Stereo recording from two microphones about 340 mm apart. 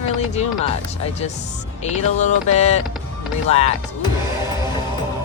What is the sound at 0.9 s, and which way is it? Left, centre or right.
Speech, centre.